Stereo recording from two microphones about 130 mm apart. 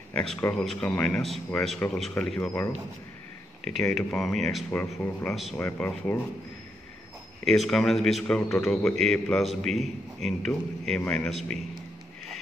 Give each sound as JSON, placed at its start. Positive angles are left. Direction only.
{"t": 0.1, "sound": "speech", "side_deg": 5}
{"t": 0.4, "sound": "a man's voice", "side_deg": 15}
{"t": 3.9, "sound": "a man's voice", "side_deg": 5}
{"t": 4.7, "sound": "a man's voice", "side_deg": 15}
{"t": 5.3, "sound": "a man's voice", "side_deg": 0}
{"t": 5.6, "sound": "a man's voice", "side_deg": 15}
{"t": 7.4, "sound": "a man's voice", "side_deg": 0}